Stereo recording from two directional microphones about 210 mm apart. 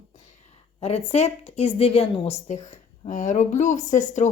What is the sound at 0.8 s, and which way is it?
A woman's voice, 30° left (ahead or behind).